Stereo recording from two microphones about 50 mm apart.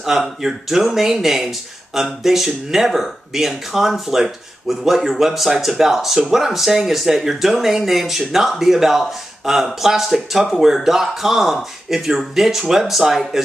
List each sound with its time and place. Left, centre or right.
0.0 s speech: centre